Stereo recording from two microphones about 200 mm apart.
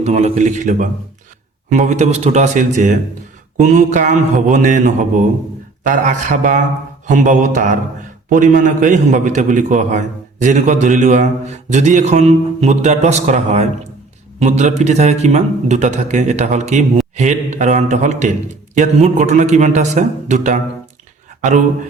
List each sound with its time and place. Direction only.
0.0 s a man's voice: 35° right (ahead or behind)